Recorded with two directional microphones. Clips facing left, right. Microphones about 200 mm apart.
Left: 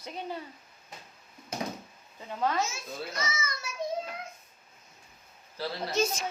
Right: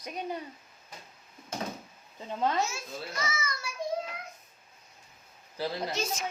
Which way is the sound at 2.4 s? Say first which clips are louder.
Even; 20° right (ahead or behind).